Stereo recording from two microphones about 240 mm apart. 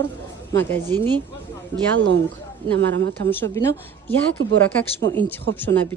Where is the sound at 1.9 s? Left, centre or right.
Right.